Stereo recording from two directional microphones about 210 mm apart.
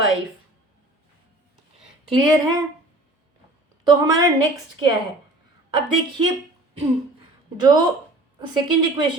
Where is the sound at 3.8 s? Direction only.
20° right (ahead or behind).